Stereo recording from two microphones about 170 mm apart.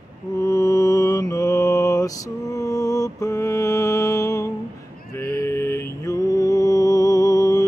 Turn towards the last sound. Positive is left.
turn(degrees=20)  # may be behind; listen again after turning